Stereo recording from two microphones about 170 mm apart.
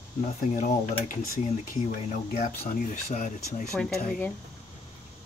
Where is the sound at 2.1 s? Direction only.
40° left (ahead or behind).